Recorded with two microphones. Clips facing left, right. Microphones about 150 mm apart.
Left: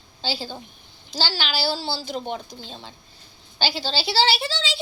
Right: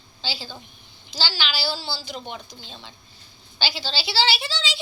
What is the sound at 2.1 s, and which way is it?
A woman's voice, 40° left (ahead or behind).